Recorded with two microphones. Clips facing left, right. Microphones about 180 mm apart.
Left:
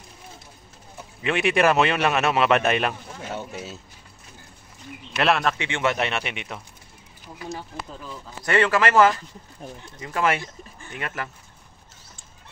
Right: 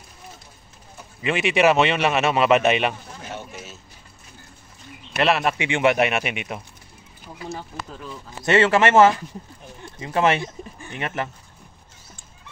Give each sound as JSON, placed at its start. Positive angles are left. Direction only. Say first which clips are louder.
{"t": 1.2, "sound": "speech", "louder": "right 2 dB", "side_deg": 0}
{"t": 5.1, "sound": "speech", "louder": "right 1 dB", "side_deg": -5}
{"t": 8.5, "sound": "a man's voice", "louder": "right 3 dB", "side_deg": -25}